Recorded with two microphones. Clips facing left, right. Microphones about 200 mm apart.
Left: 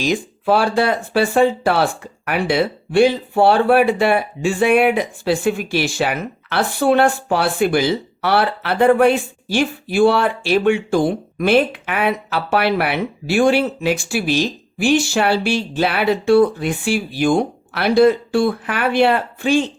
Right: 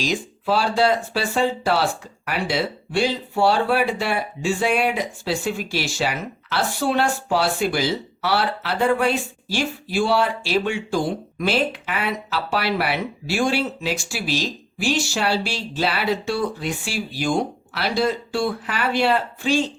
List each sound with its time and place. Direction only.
0.0 s speech: 55° left (ahead or behind)